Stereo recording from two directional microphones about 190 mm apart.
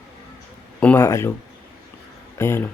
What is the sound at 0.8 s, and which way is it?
Speech, 10° left (ahead or behind).